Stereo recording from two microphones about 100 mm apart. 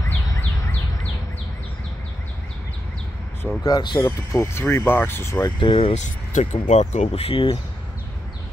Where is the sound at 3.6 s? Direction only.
40° left (ahead or behind).